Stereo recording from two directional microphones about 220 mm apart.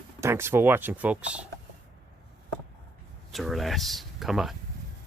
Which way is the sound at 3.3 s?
Centre (ahead or behind).